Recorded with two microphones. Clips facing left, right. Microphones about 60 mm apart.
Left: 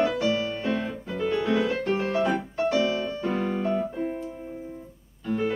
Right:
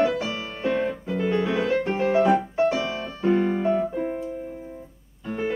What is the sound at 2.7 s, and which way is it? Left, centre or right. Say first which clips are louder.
Piano: left 3 dB; centre.